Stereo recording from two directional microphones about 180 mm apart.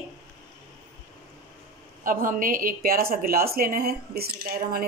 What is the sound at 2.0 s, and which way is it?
Speech, 50° right (ahead or behind).